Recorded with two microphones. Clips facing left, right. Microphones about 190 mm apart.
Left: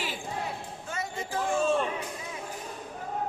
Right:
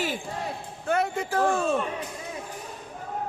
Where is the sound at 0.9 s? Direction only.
60° right (ahead or behind).